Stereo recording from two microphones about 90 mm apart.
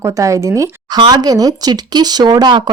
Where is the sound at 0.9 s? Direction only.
50° right (ahead or behind).